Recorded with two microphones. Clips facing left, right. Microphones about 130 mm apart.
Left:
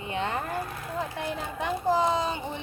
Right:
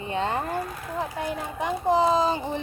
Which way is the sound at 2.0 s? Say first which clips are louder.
Right 4 dB; 30° right (ahead or behind).